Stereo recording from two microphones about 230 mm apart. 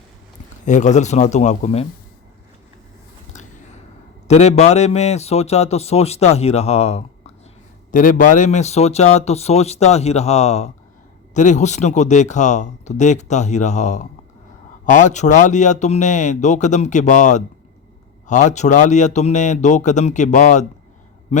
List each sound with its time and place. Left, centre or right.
0.6 s speech: left
4.3 s a man's voice: left